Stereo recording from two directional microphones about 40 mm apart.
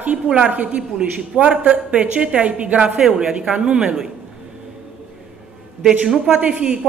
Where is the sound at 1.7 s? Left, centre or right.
Right.